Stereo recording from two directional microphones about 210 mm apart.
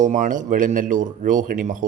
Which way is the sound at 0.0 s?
35° right (ahead or behind).